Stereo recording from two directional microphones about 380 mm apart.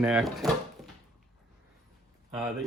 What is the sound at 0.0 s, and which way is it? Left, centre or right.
Speech, centre.